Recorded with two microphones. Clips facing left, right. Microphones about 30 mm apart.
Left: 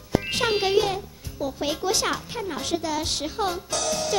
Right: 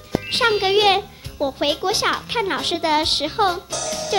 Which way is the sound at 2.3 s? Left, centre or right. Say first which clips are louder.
Right 6 dB; right.